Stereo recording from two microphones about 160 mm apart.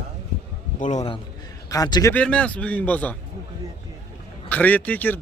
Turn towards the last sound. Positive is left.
turn(degrees=10)  # may be behind; listen again after turning